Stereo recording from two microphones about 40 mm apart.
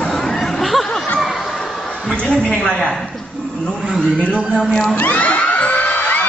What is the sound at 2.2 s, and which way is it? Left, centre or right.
Speech, left.